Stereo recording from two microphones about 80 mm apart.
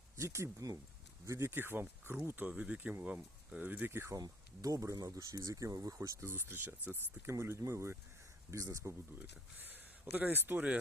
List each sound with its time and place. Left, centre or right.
0.2 s speech: right
4.2 s speech: right
9.1 s speech: right